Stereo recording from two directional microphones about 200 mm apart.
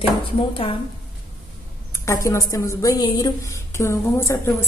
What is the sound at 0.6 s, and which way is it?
Speech, 30° left (ahead or behind).